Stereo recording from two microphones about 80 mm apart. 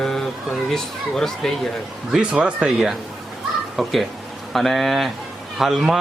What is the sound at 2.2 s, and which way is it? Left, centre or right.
Speech, centre.